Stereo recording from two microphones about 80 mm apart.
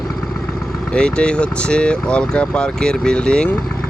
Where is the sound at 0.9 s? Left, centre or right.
Centre.